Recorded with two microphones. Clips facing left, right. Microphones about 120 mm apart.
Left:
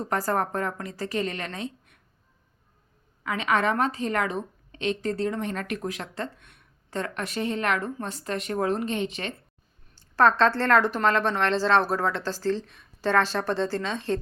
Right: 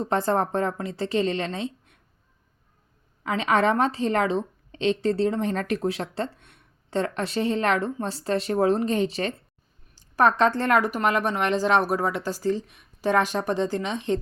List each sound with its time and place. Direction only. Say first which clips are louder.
0.0 s a woman's voice: right 3 dB; 25° right (ahead or behind)
3.2 s a woman's voice: right 3 dB; 30° right (ahead or behind)
9.9 s speech: even; 15° right (ahead or behind)